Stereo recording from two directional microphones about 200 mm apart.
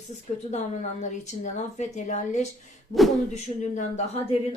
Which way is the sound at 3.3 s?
35° left (ahead or behind).